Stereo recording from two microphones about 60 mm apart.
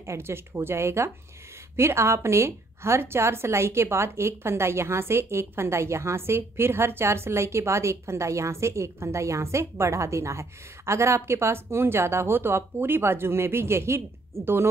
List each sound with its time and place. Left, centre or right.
0.0 s a woman's voice: right